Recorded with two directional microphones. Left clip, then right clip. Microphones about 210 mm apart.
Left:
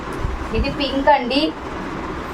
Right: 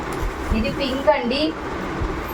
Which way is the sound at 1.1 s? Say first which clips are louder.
Left 3 dB; 55° left (ahead or behind).